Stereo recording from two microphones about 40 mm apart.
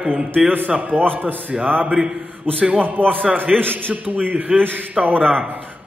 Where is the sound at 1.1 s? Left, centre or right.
Right.